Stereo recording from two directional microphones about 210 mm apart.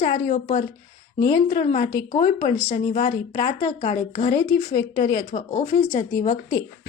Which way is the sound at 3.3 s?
20° left (ahead or behind).